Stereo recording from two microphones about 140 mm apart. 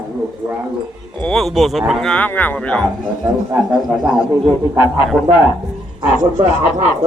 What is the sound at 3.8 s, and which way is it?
Speech, 5° right (ahead or behind).